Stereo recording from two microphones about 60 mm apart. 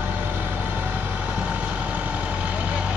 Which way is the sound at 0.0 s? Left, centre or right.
Right.